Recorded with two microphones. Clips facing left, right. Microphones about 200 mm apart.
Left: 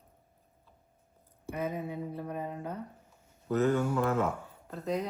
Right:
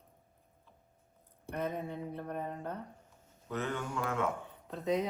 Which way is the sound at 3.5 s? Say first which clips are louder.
Left 9 dB; 40° left (ahead or behind).